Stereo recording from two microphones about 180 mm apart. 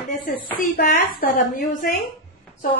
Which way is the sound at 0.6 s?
50° left (ahead or behind).